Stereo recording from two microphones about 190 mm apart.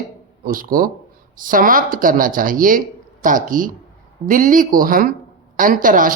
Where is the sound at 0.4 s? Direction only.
50° right (ahead or behind).